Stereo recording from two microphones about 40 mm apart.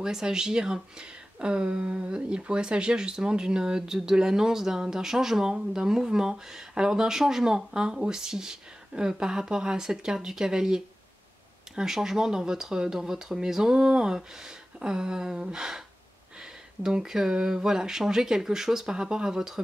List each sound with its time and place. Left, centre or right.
0.0 s speech: centre